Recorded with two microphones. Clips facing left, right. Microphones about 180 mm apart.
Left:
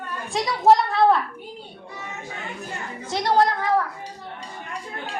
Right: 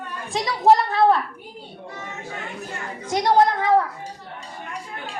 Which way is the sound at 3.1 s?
20° right (ahead or behind).